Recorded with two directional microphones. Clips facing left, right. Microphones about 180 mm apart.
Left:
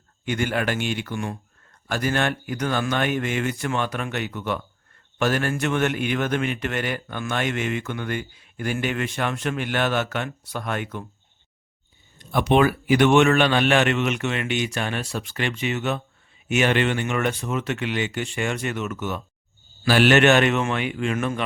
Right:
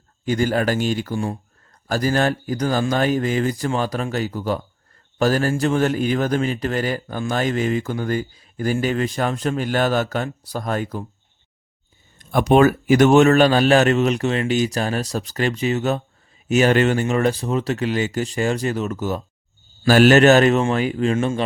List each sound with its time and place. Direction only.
0.3 s a man's voice: 35° right (ahead or behind)
12.2 s a man's voice: 45° right (ahead or behind); by 21.4 s 30° right (ahead or behind)